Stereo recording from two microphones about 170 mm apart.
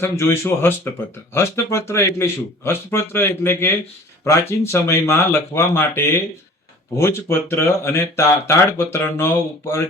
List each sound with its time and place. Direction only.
0.0 s speech: 15° left (ahead or behind)